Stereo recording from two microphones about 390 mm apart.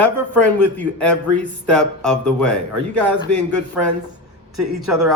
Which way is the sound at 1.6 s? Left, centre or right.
Centre.